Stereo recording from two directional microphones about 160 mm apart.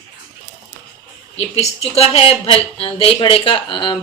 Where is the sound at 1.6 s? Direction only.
40° left (ahead or behind).